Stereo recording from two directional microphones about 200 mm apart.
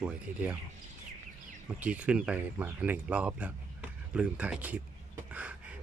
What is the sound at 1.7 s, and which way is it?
Speech, 5° right (ahead or behind).